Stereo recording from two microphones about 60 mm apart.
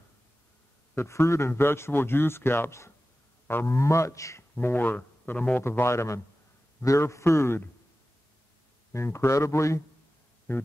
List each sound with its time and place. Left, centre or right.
0.9 s speech: left
1.5 s speech: left
4.4 s speech: left
5.6 s speech: left
8.9 s speech: left
10.5 s speech: left